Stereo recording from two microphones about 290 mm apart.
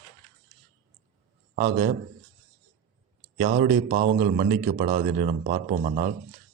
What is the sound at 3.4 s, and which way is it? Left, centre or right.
A man's voice, right.